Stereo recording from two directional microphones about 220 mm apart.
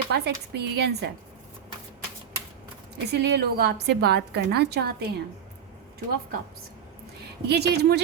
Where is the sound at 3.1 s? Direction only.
50° right (ahead or behind).